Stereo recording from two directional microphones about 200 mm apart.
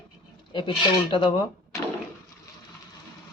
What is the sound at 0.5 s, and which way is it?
Speech, 25° left (ahead or behind).